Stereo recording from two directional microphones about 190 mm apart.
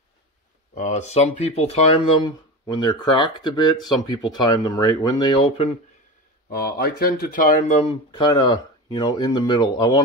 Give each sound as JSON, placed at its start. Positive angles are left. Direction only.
{"t": 0.7, "sound": "speech", "side_deg": 40}
{"t": 2.2, "sound": "speech", "side_deg": 20}
{"t": 6.5, "sound": "speech", "side_deg": 50}